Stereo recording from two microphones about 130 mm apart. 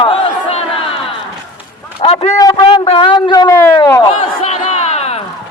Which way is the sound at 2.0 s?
50° left (ahead or behind).